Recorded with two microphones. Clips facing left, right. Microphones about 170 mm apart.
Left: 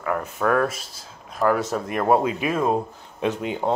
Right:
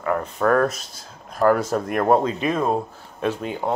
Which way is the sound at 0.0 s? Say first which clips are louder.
Right 2 dB; centre (ahead or behind).